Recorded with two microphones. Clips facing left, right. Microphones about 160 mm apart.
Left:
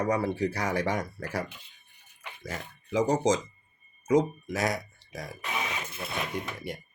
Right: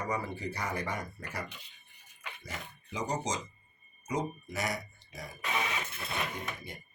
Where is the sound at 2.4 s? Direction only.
90° left.